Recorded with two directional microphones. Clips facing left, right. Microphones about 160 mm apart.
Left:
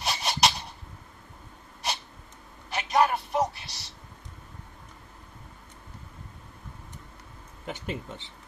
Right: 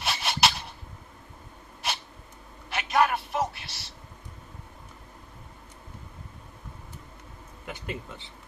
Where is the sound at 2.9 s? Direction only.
25° left (ahead or behind).